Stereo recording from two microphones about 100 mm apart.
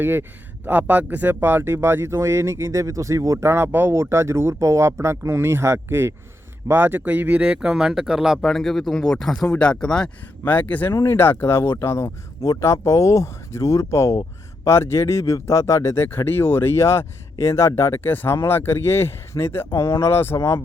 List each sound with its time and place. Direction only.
0.0 s speech: 20° right (ahead or behind); by 20.6 s 25° left (ahead or behind)